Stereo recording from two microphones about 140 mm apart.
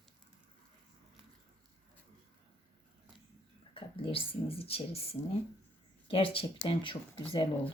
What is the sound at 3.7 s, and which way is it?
Speech, 40° left (ahead or behind).